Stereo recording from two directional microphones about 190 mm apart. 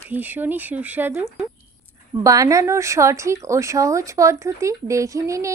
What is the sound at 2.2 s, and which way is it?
Speech, 15° right (ahead or behind).